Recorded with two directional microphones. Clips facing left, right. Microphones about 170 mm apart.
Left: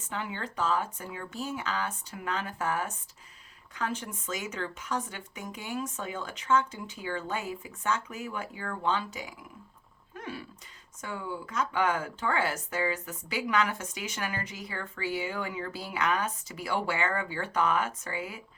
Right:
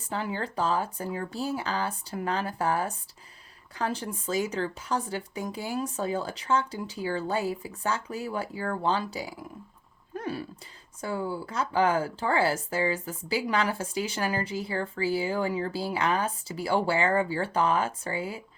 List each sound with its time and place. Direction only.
0.0 s speech: 35° right (ahead or behind)
10.2 s a sound: 35° right (ahead or behind)
11.0 s speech: 35° right (ahead or behind)